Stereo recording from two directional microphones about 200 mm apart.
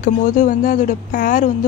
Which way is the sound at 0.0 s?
40° left (ahead or behind).